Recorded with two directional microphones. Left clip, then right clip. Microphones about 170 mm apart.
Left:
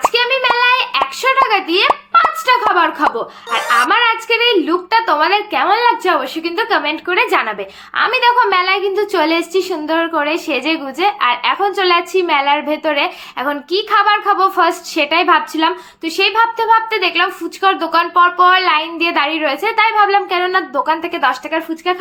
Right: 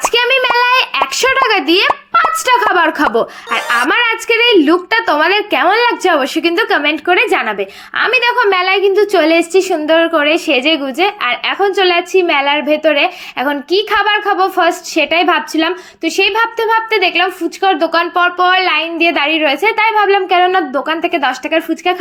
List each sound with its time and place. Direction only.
0.1 s a sound: 55° right (ahead or behind)
2.7 s speech: 45° right (ahead or behind)
3.5 s music: centre (ahead or behind)
3.8 s a woman's voice: 45° right (ahead or behind)
7.1 s a woman's voice: 25° right (ahead or behind)